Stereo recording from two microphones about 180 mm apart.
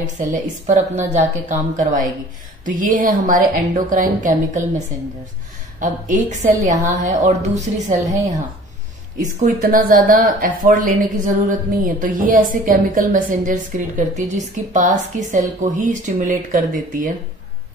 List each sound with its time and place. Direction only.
0.3 s a woman's voice: 40° right (ahead or behind)
9.2 s speech: 50° right (ahead or behind)